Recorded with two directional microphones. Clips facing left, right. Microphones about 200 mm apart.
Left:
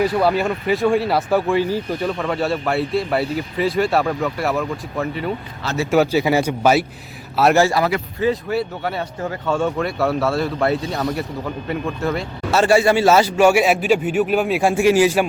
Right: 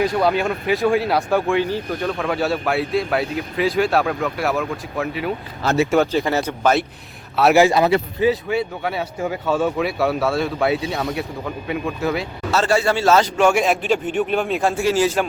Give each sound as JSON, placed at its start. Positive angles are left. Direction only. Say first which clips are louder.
{"t": 0.0, "sound": "a man's voice", "louder": "left 1 dB", "side_deg": 5}
{"t": 7.5, "sound": "speech", "louder": "right 2 dB", "side_deg": -20}
{"t": 8.4, "sound": "speech", "louder": "even", "side_deg": 0}
{"t": 12.5, "sound": "a man's voice", "louder": "left 4 dB", "side_deg": 10}